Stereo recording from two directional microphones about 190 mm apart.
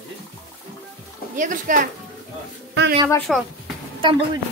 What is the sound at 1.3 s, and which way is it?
Speech, 45° right (ahead or behind).